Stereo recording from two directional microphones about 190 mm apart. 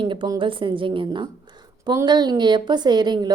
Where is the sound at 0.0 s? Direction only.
25° right (ahead or behind).